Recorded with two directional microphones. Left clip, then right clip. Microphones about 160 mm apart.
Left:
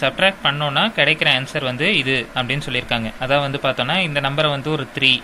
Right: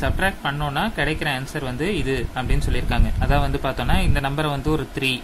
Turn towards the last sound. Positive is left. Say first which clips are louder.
# left 6 dB
turn(degrees=-15)  # may be behind; listen again after turning